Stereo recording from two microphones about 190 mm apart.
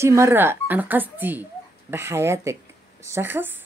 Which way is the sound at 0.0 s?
15° right (ahead or behind).